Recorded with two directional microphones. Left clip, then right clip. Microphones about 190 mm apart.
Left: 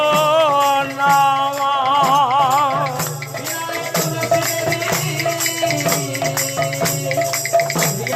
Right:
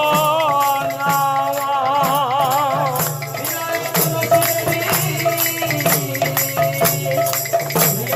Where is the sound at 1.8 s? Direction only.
25° left (ahead or behind).